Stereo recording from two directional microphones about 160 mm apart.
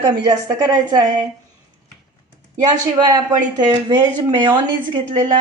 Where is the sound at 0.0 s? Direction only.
25° right (ahead or behind).